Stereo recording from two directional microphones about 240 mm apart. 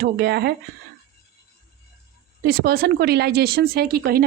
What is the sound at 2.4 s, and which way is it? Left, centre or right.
A woman's voice, right.